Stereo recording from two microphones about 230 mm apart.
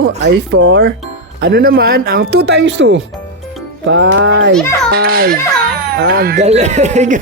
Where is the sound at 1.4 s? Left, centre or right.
Right.